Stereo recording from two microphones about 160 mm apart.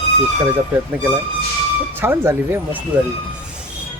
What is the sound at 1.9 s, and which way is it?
Speech, 15° right (ahead or behind).